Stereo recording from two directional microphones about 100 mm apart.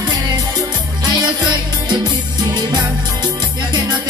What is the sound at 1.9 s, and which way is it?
Music, 45° right (ahead or behind).